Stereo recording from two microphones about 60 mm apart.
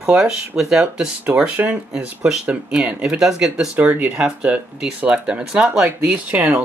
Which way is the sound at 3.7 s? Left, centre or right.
Right.